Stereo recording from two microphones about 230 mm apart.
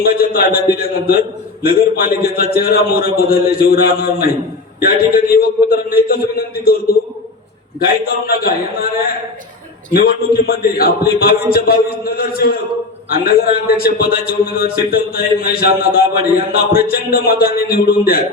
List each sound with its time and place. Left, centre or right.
0.0 s a man's voice: left
8.0 s a man's voice: left
9.9 s a man's voice: left